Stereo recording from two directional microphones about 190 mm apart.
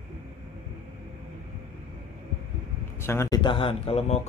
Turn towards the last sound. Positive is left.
turn(degrees=30)  # may be behind; listen again after turning